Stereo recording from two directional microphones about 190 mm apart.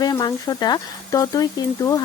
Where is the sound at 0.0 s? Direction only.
20° left (ahead or behind).